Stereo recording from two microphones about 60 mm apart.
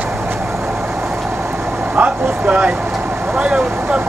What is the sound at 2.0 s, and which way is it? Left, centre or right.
Vehicle, right.